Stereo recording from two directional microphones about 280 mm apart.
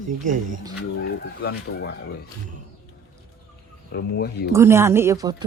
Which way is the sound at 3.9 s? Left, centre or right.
Left.